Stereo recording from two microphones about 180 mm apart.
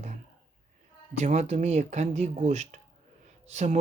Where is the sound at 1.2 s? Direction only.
40° right (ahead or behind).